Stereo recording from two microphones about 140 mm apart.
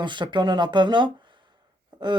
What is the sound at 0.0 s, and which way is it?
Speech, 35° right (ahead or behind).